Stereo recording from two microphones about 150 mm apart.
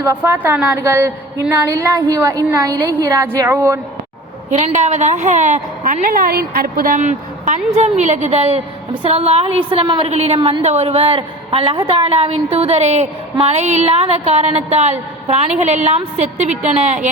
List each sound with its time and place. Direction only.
0.0 s a woman's voice: 15° right (ahead or behind)
4.5 s a woman's voice: 50° right (ahead or behind); by 10.1 s 35° right (ahead or behind)
10.1 s a woman's voice: 45° right (ahead or behind)